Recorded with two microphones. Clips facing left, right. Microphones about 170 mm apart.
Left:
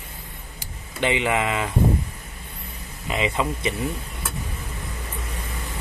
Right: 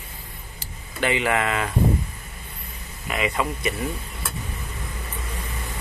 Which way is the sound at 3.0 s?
25° left (ahead or behind).